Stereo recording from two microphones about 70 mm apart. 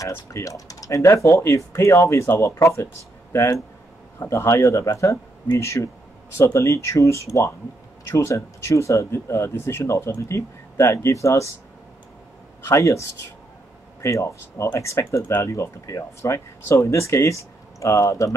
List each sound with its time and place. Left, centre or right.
0.0 s speech: left
4.2 s speech: left
12.6 s speech: left
14.0 s speech: left